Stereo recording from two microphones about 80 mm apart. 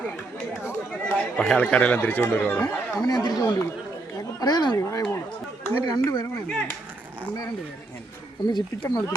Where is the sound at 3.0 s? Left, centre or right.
Left.